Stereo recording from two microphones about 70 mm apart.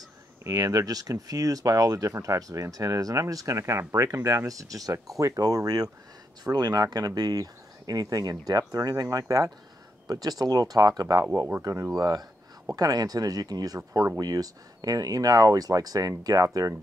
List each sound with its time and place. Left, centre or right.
0.4 s speech: right
10.0 s speech: right
11.6 s speech: right
12.0 s speech: right